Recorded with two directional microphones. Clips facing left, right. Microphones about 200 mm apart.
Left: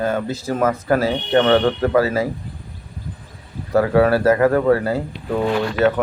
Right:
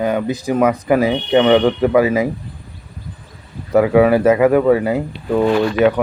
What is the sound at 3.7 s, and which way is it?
Speech, 15° right (ahead or behind).